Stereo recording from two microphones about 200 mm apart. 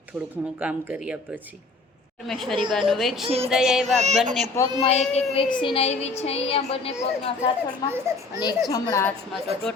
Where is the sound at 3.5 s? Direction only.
Centre (ahead or behind).